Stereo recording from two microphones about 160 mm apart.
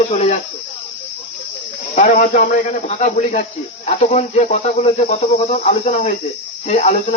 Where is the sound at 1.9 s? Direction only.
50° left (ahead or behind).